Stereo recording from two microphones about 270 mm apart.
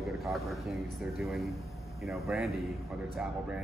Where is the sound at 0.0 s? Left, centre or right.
Centre.